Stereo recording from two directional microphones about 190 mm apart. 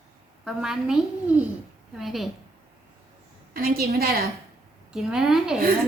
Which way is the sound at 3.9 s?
55° right (ahead or behind).